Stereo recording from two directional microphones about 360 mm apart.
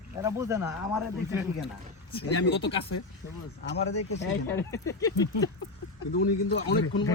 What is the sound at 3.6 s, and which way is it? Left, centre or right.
Speech, left.